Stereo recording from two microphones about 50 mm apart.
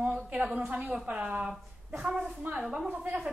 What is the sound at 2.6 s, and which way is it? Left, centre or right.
Speech, centre.